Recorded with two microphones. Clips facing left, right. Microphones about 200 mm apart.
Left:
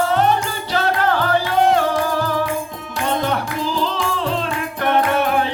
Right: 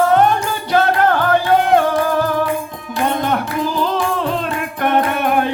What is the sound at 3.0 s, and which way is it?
Music, 50° right (ahead or behind).